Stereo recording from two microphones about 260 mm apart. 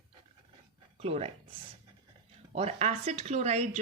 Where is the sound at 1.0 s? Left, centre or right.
Right.